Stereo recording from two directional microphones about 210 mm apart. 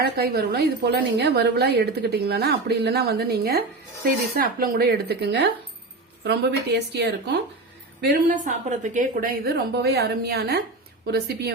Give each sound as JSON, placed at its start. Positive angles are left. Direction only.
{"t": 0.0, "sound": "a woman's voice", "side_deg": -50}
{"t": 6.7, "sound": "a woman's voice", "side_deg": -55}
{"t": 8.0, "sound": "a woman's voice", "side_deg": -40}